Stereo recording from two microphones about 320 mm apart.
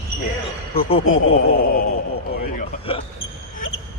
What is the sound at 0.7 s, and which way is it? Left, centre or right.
Speech, centre.